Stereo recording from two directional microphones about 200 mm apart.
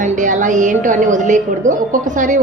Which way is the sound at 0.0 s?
40° right (ahead or behind).